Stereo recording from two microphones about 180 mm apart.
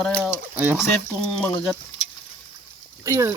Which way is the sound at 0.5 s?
5° right (ahead or behind).